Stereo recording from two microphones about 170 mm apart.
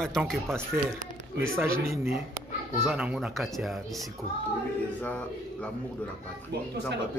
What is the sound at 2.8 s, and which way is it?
Speech, 5° right (ahead or behind).